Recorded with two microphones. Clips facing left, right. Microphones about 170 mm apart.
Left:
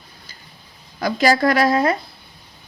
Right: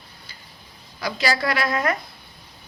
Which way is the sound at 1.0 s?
50° left (ahead or behind).